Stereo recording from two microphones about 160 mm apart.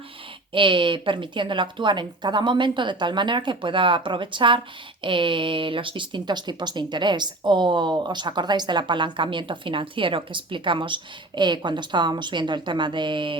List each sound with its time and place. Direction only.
0.5 s a woman's voice: 30° right (ahead or behind)